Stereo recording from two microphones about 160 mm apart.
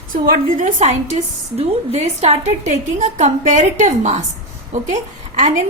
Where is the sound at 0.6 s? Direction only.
45° right (ahead or behind).